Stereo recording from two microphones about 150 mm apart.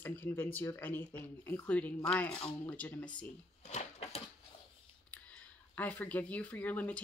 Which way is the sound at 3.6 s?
45° left (ahead or behind).